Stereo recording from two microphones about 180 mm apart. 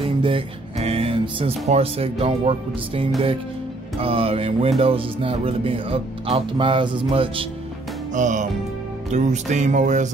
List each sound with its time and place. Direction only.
0.0 s speech: 30° right (ahead or behind)
8.1 s music: 45° right (ahead or behind)
9.1 s speech: 40° right (ahead or behind)